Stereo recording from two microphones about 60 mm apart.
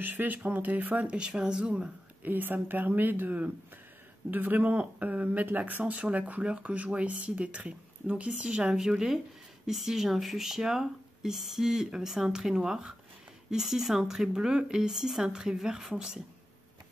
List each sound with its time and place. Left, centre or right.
0.0 s speech: right; by 1.9 s centre
2.2 s speech: right; by 16.2 s centre